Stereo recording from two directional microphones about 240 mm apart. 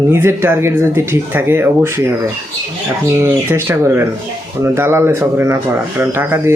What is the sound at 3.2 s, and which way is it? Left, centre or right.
Speech, centre.